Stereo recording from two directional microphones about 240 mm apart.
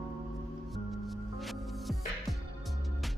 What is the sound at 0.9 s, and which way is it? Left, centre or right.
Music, centre.